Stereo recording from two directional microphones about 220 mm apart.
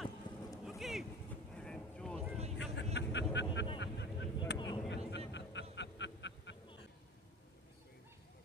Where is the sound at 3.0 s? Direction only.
50° left (ahead or behind).